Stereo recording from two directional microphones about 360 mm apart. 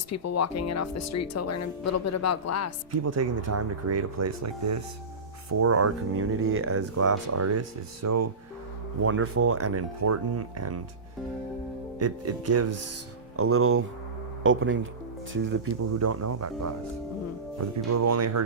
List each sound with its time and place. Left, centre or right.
0.1 s speech: left
2.9 s speech: right
11.9 s speech: right
16.0 s speech: right